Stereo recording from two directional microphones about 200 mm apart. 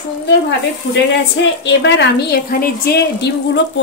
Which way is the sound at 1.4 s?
65° left (ahead or behind).